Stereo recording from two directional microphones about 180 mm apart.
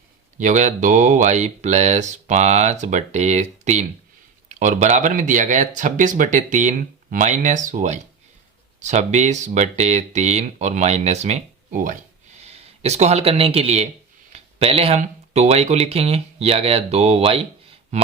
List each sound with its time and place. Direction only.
0.3 s speech: 45° right (ahead or behind)
12.4 s speech: 35° right (ahead or behind)